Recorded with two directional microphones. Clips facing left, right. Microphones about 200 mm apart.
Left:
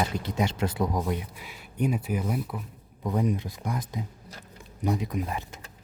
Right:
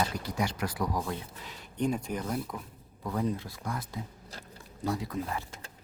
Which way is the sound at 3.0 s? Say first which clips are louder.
Left 4 dB; 20° left (ahead or behind).